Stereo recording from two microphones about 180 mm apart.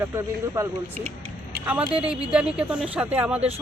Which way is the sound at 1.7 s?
5° right (ahead or behind).